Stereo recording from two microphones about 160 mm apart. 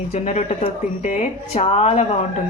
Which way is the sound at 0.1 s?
45° left (ahead or behind).